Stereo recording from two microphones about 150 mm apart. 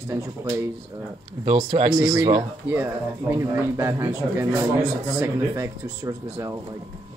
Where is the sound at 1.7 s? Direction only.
50° right (ahead or behind).